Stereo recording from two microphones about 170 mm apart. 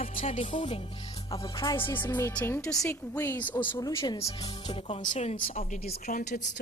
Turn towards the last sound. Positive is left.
turn(degrees=50)  # may be behind; listen again after turning